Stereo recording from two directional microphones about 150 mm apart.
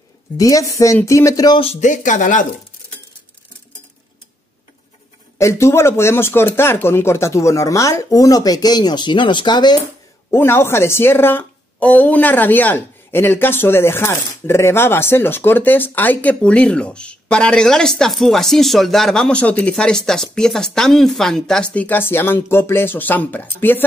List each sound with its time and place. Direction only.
0.4 s speech: 20° left (ahead or behind)
1.6 s speech: 50° left (ahead or behind)
5.4 s speech: 20° left (ahead or behind)
10.3 s a woman's voice: 15° left (ahead or behind)